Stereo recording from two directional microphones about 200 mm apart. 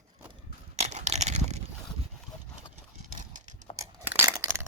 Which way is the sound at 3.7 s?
10° right (ahead or behind).